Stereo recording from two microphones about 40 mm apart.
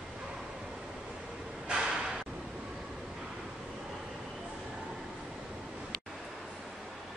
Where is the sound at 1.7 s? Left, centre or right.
Centre.